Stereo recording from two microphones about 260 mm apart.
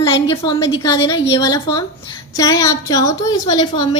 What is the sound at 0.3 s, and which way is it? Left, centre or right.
A woman's voice, centre.